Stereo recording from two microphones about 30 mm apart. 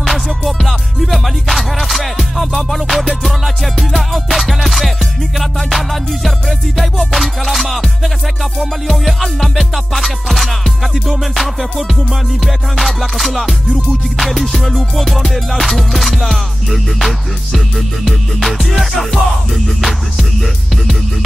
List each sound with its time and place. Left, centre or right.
0.0 s music: centre
6.8 s music: centre
12.7 s music: centre
13.7 s music: centre
14.2 s music: centre